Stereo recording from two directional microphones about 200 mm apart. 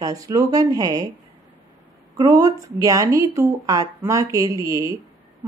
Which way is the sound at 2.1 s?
15° right (ahead or behind).